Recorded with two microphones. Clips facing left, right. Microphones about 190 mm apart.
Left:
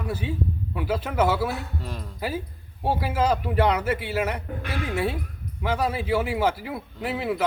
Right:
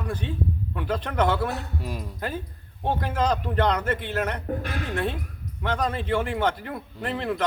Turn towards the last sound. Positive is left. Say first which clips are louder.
# left 1 dB
turn(degrees=5)  # may be behind; listen again after turning